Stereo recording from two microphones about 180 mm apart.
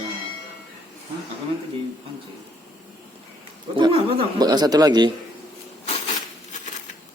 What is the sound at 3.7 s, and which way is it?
Speech, 25° right (ahead or behind).